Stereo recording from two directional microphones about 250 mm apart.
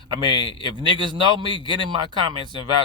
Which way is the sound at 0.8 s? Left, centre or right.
Centre.